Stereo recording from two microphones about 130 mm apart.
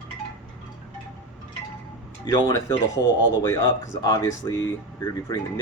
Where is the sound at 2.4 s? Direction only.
20° left (ahead or behind).